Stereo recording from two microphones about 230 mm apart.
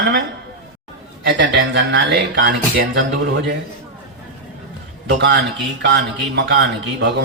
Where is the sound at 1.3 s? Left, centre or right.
Right.